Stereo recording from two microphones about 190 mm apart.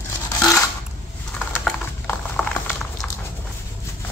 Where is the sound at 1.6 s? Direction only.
5° left (ahead or behind).